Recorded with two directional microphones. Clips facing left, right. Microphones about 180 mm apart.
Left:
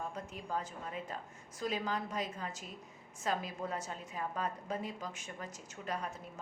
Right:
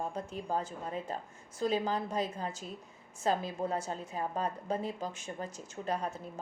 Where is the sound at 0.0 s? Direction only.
30° right (ahead or behind).